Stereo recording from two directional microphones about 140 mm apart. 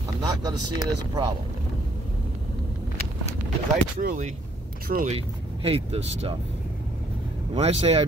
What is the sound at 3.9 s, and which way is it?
Speech, 70° right (ahead or behind).